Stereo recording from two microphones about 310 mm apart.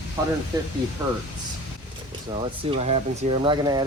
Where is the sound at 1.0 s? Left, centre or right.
Centre.